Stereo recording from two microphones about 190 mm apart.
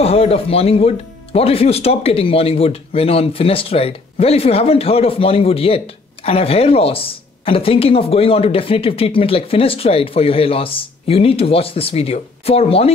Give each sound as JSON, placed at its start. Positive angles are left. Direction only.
{"t": 0.0, "sound": "speech", "side_deg": 30}